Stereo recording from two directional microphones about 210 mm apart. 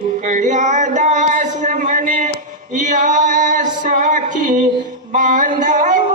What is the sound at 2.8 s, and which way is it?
Music, 35° right (ahead or behind).